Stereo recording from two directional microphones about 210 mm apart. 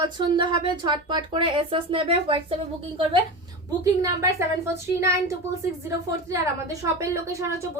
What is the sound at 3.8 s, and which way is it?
Speech, 15° right (ahead or behind).